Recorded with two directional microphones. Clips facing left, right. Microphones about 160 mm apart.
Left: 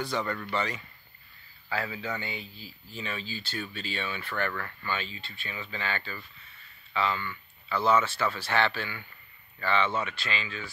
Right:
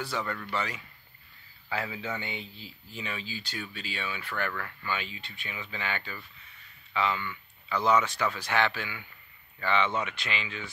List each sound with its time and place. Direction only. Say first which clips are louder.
0.0 s speech: left 2 dB; 5° right (ahead or behind)
1.7 s speech: left 1 dB; 20° right (ahead or behind)